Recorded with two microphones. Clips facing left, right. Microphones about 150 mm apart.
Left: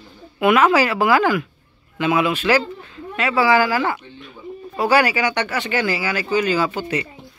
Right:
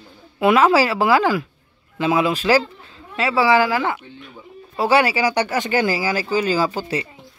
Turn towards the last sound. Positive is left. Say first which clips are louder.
# even
turn(degrees=-35)  # may be behind; listen again after turning